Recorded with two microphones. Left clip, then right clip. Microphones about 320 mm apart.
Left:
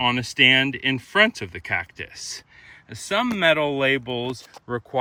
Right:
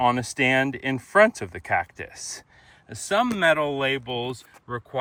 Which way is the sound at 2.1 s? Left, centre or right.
Right.